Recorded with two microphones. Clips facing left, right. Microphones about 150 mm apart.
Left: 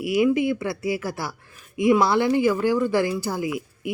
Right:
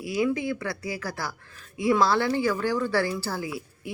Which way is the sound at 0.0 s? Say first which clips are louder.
Left 6 dB; 15° left (ahead or behind).